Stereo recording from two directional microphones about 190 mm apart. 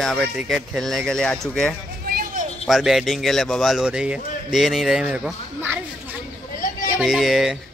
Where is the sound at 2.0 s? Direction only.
50° right (ahead or behind).